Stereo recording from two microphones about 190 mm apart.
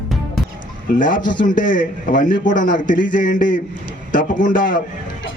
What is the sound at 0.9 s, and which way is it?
A man's voice, 45° left (ahead or behind).